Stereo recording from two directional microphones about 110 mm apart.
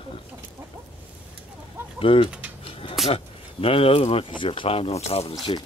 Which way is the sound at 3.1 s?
60° left (ahead or behind).